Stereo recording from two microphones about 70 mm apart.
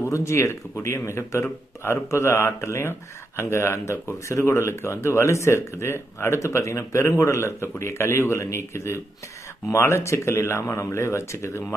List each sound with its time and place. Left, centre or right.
0.0 s speech: left